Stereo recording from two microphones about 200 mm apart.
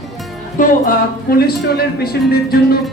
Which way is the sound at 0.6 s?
40° left (ahead or behind).